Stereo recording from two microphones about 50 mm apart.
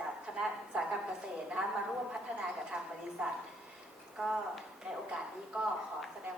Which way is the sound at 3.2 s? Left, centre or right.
Centre.